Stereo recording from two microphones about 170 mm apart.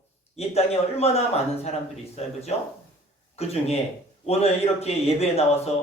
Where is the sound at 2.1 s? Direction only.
40° left (ahead or behind).